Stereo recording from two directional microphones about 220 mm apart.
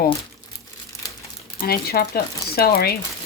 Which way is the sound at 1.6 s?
45° left (ahead or behind).